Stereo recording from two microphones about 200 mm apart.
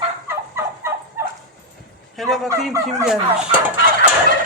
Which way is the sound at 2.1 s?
Centre (ahead or behind).